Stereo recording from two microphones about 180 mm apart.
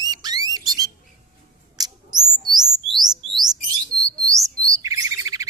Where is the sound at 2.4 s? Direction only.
25° right (ahead or behind).